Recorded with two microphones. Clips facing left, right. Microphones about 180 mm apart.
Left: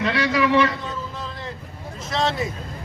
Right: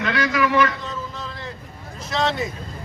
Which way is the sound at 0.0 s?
30° left (ahead or behind).